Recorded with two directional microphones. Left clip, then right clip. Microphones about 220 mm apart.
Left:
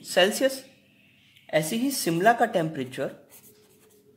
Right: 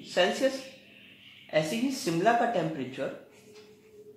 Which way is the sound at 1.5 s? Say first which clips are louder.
Left 3 dB; 45° left (ahead or behind).